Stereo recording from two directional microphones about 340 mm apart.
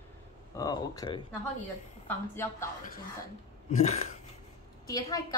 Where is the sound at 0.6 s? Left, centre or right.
Centre.